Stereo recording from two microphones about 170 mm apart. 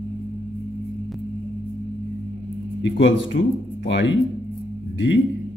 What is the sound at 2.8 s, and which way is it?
Speech, 90° left.